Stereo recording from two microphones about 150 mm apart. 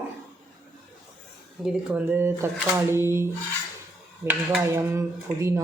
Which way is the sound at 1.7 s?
5° right (ahead or behind).